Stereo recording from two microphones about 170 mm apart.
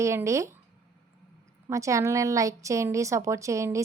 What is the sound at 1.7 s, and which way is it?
Speech, 20° right (ahead or behind).